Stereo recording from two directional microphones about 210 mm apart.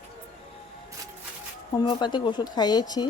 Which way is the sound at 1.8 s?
20° left (ahead or behind).